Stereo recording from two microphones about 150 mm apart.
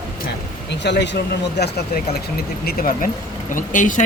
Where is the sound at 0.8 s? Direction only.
90° left.